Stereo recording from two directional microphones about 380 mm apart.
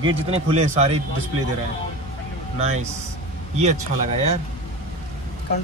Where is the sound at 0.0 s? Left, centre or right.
Centre.